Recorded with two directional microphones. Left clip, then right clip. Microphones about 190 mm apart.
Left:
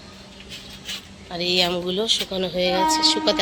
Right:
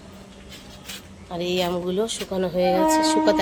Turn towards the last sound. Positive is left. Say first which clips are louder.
# right 1 dB
turn(degrees=-20)  # may be behind; listen again after turning